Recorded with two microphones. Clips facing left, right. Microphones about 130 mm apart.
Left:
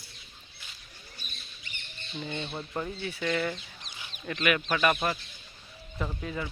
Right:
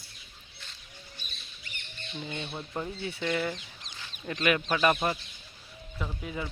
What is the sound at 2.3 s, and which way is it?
Speech, 25° left (ahead or behind).